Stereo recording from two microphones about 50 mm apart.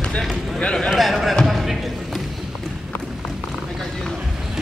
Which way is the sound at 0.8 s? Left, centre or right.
Centre.